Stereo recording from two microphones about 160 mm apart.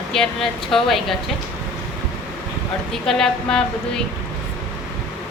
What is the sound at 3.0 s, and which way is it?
Speech, 5° left (ahead or behind).